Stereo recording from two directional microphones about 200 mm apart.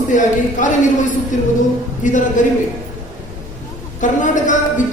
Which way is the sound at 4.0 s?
40° left (ahead or behind).